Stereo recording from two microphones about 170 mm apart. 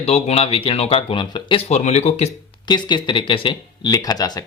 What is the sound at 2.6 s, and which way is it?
Speech, 25° left (ahead or behind).